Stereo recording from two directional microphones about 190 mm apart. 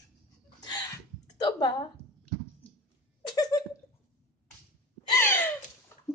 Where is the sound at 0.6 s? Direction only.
20° left (ahead or behind).